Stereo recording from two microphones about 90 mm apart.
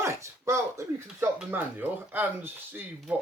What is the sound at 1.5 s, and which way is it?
Speech, 20° right (ahead or behind).